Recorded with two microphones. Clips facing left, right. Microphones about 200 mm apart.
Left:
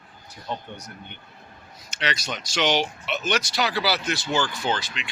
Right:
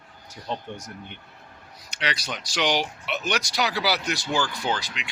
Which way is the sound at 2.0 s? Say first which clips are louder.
Left 1 dB; 10° right (ahead or behind).